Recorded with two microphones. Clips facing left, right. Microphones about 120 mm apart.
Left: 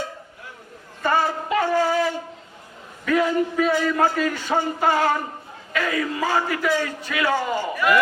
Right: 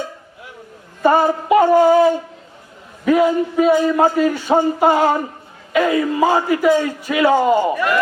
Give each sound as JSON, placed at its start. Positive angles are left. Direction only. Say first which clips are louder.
{"t": 1.0, "sound": "a man's voice", "louder": "right 8 dB", "side_deg": -15}